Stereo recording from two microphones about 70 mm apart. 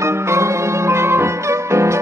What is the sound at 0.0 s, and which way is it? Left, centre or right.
Music, right.